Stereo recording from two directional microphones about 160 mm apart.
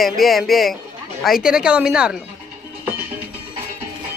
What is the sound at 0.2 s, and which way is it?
Speech, centre (ahead or behind).